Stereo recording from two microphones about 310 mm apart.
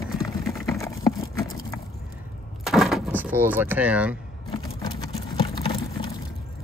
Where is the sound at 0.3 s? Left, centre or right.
Centre.